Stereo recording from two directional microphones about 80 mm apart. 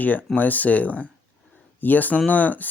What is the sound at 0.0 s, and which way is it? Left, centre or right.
Speech, left.